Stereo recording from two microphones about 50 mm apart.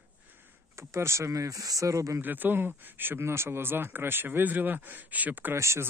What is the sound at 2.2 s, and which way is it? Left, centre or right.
Speech, right.